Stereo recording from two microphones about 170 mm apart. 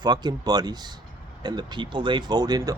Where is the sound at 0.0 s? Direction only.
25° right (ahead or behind).